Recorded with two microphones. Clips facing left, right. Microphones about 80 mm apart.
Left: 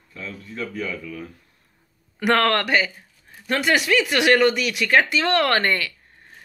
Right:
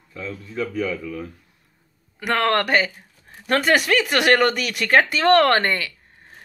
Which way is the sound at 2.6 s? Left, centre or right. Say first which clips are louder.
Right 1 dB; right.